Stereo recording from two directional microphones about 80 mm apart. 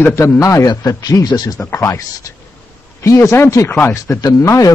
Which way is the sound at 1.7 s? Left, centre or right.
Left.